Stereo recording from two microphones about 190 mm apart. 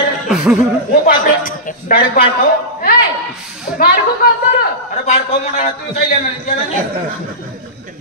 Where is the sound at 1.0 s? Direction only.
50° left (ahead or behind).